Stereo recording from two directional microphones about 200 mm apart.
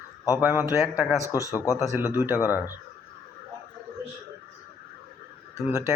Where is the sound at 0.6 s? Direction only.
10° right (ahead or behind).